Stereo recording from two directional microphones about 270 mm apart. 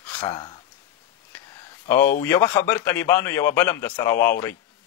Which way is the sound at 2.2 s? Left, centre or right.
Centre.